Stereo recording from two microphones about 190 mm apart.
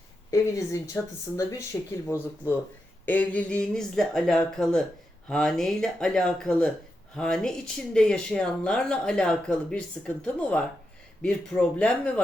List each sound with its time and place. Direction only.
0.3 s speech: 15° left (ahead or behind)
3.1 s speech: 10° left (ahead or behind)